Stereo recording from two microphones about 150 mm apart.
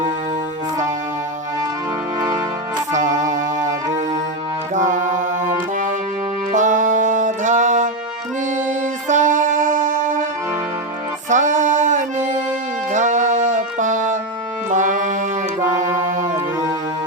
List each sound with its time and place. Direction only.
2.9 s music: 55° right (ahead or behind)
9.0 s music: 55° right (ahead or behind)
11.3 s music: 55° right (ahead or behind)
14.7 s brass instrument: 55° right (ahead or behind)
15.6 s music: 55° right (ahead or behind)